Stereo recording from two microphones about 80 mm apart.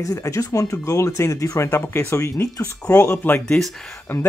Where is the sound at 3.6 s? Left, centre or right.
Centre.